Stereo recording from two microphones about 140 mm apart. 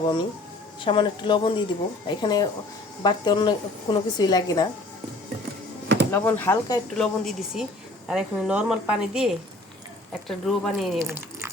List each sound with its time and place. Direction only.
0.0 s a woman's voice: 35° left (ahead or behind)
6.1 s speech: 15° left (ahead or behind)
6.9 s a woman's voice: centre (ahead or behind)
11.0 s a sound: 20° right (ahead or behind)